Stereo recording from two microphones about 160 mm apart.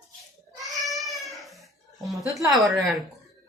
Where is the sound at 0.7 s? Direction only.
Centre (ahead or behind).